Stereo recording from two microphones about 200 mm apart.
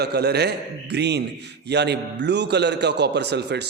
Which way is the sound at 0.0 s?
55° right (ahead or behind).